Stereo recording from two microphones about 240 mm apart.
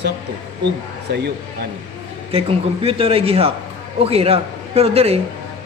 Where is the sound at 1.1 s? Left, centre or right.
Right.